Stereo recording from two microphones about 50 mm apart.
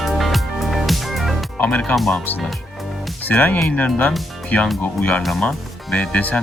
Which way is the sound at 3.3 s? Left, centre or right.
Left.